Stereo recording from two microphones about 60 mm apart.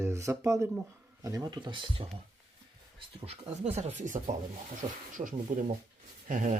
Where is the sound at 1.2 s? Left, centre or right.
Right.